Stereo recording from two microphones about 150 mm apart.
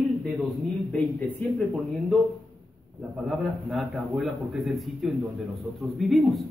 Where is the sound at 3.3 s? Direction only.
Centre (ahead or behind).